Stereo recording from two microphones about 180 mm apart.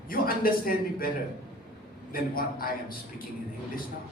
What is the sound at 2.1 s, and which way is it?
Speech, 55° left (ahead or behind).